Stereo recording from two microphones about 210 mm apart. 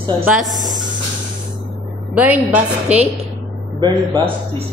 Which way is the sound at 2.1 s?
5° right (ahead or behind).